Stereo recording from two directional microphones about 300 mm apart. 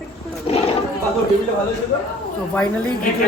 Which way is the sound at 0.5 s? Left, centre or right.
Centre.